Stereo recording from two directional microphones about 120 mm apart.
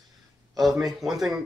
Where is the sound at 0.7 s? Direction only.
30° right (ahead or behind).